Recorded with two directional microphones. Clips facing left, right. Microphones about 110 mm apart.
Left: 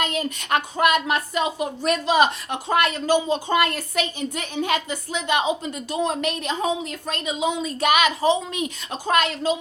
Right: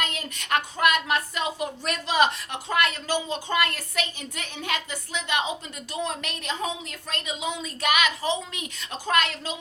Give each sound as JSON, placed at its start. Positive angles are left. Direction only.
{"t": 0.0, "sound": "a woman's voice", "side_deg": 20}